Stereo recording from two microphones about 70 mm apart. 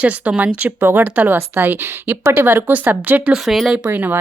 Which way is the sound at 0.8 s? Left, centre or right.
Right.